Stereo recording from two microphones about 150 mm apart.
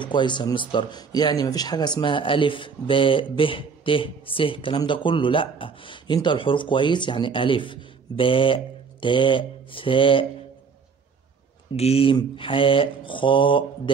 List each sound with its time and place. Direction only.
0.0 s speech: 30° left (ahead or behind)
11.7 s speech: 45° left (ahead or behind)